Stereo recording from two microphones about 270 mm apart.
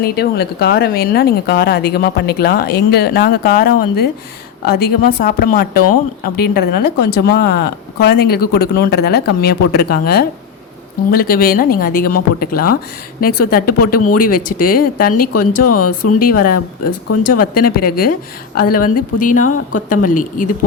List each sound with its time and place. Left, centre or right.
0.0 s speech: left
13.7 s speech: left
14.6 s speech: left
15.1 s speech: left
16.2 s speech: left
16.9 s speech: left
17.5 s speech: left